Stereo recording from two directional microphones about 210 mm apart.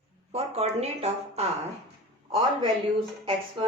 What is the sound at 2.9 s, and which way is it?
Speech, 25° right (ahead or behind).